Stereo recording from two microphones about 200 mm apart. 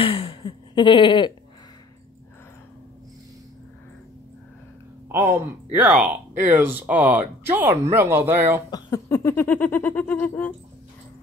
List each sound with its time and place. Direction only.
0.0 s a sound: 25° left (ahead or behind)
5.0 s speech: 10° right (ahead or behind)
8.6 s speech: 20° left (ahead or behind)